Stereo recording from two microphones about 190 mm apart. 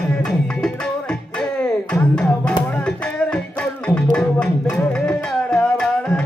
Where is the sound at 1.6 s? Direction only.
5° left (ahead or behind).